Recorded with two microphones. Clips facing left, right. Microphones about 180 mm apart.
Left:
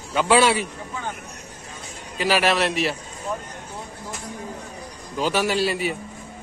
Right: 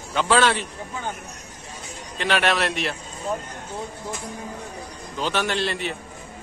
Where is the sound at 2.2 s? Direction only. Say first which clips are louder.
Left 2 dB; 5° left (ahead or behind).